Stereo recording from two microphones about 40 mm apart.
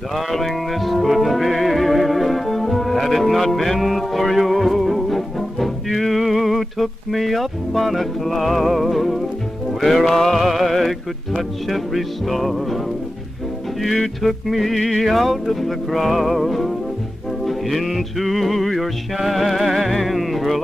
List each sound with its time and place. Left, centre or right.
0.1 s music: centre
13.8 s music: centre